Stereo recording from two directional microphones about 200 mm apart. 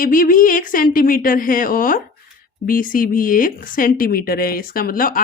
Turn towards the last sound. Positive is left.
turn(degrees=45)  # may be behind; listen again after turning